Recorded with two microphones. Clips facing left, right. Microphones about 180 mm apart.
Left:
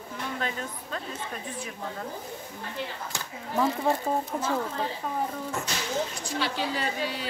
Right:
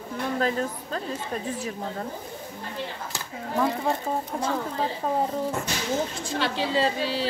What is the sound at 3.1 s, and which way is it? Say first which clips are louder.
Speech: right 1 dB; centre (ahead or behind).